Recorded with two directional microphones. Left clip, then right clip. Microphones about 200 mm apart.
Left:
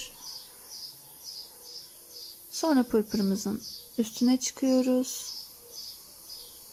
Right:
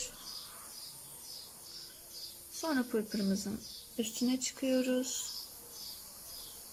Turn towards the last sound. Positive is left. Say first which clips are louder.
# left 6 dB
turn(degrees=25)  # may be behind; listen again after turning